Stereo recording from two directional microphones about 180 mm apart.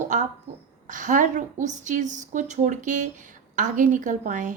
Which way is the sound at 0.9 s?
45° right (ahead or behind).